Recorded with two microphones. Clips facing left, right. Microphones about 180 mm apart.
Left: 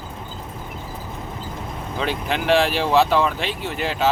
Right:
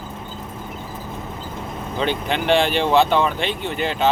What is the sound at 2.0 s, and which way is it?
Speech, centre (ahead or behind).